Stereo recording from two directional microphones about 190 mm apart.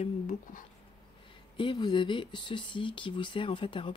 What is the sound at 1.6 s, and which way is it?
Speech, 25° left (ahead or behind).